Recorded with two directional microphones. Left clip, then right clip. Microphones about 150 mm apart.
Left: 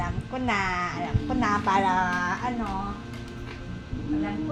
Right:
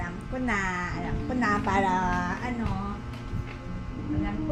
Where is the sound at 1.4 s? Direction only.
45° right (ahead or behind).